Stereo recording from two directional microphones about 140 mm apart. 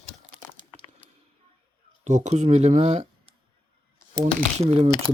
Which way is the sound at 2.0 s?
60° right (ahead or behind).